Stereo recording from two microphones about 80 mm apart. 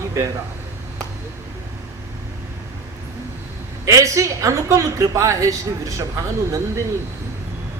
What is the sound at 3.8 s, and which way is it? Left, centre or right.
A woman's voice, right.